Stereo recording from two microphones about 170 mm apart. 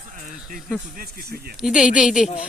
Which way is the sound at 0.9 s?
65° right (ahead or behind).